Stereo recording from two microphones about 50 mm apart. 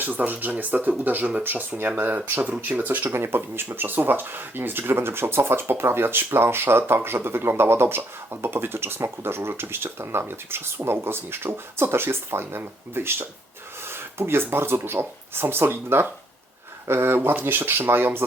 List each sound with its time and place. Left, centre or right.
0.0 s speech: right
3.1 s speech: right